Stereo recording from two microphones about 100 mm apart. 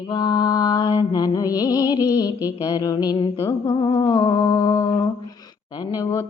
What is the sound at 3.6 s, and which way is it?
Humming, 50° left (ahead or behind).